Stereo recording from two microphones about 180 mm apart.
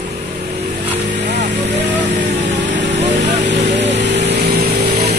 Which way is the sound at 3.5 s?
75° right (ahead or behind).